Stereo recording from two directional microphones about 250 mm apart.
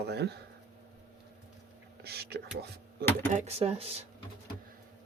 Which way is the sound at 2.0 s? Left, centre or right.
Right.